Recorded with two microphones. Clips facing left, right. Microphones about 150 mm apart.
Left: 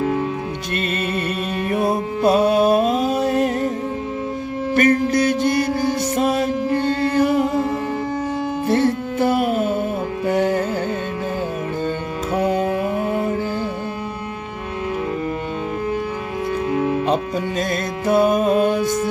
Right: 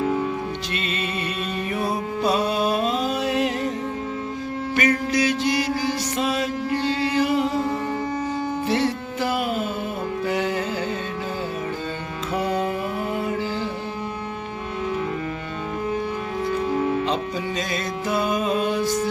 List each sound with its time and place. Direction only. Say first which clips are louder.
1.7 s music: left 6 dB; 50° left (ahead or behind)
4.8 s mantra: left 5 dB; 50° left (ahead or behind)
8.6 s music: left 7 dB; 50° left (ahead or behind)
12.3 s music: left 4 dB; 50° left (ahead or behind)
17.6 s music: left 4 dB; 55° left (ahead or behind)